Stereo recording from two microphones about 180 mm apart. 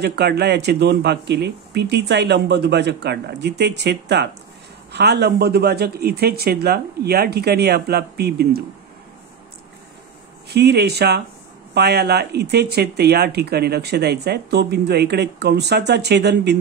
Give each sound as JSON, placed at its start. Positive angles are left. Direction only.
{"t": 0.0, "sound": "speech", "side_deg": -65}
{"t": 10.5, "sound": "speech", "side_deg": -65}